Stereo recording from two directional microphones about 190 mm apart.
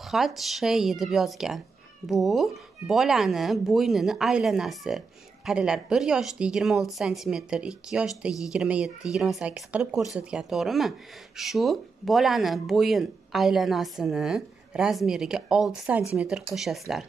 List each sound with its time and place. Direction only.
0.1 s speech: centre (ahead or behind)